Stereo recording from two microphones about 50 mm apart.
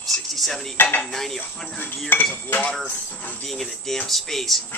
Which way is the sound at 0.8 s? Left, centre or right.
Left.